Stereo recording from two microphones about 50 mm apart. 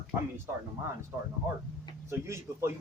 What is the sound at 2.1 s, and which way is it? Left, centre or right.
Speech, right.